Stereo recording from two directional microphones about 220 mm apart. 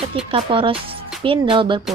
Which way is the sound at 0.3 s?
25° right (ahead or behind).